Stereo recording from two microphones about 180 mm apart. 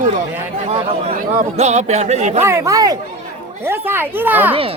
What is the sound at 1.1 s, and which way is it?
Speech, 40° right (ahead or behind).